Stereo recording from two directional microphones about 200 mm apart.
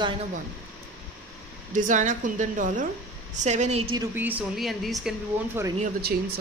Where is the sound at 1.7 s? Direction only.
40° right (ahead or behind).